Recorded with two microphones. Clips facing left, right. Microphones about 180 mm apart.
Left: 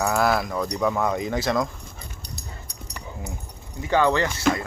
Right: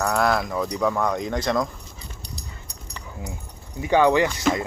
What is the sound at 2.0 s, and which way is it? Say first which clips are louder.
Dog: right 2 dB; 50° left (ahead or behind).